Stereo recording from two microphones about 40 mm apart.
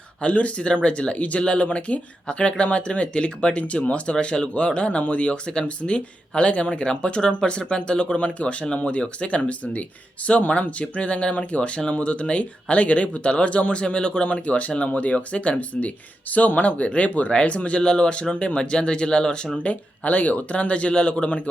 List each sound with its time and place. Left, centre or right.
0.2 s speech: left
19.6 s speech: left